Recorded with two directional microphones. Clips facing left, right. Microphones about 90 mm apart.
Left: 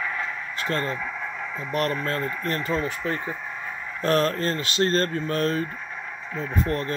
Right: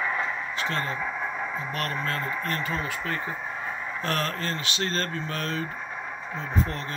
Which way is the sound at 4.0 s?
35° left (ahead or behind).